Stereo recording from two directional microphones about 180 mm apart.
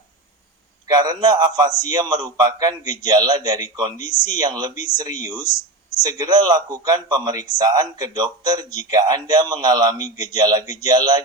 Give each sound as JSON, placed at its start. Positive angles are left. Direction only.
{"t": 0.9, "sound": "a man's voice", "side_deg": -20}